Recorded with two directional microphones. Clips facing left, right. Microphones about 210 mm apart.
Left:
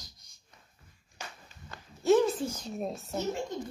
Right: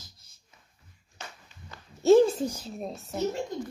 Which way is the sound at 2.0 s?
30° right (ahead or behind).